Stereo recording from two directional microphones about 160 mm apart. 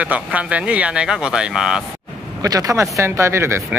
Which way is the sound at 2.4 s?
20° right (ahead or behind).